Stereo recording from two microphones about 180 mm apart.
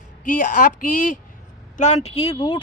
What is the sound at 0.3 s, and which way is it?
A man's voice, 45° left (ahead or behind).